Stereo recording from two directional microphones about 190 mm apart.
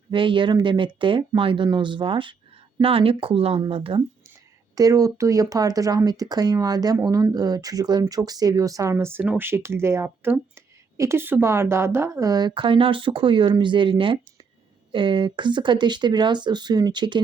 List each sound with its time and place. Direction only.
0.1 s speech: 25° right (ahead or behind)
4.7 s speech: 20° right (ahead or behind)